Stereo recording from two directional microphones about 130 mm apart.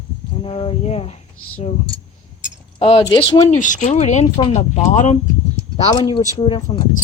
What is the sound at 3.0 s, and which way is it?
Mantra, 30° left (ahead or behind).